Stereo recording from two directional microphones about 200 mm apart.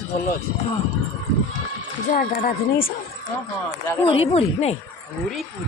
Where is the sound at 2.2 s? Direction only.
45° left (ahead or behind).